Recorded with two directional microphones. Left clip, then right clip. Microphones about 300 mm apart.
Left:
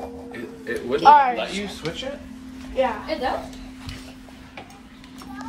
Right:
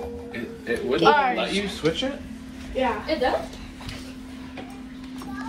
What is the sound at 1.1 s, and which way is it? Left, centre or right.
Speech, left.